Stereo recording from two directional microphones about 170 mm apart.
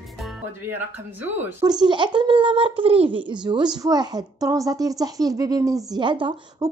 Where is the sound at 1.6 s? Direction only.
25° right (ahead or behind).